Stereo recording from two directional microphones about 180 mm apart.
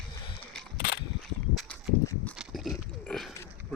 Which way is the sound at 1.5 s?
5° left (ahead or behind).